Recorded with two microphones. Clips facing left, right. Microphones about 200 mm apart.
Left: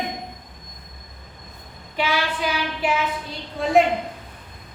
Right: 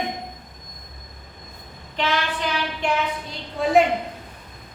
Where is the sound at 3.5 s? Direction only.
Centre (ahead or behind).